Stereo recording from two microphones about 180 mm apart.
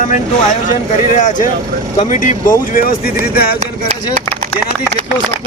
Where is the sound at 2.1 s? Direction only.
45° left (ahead or behind).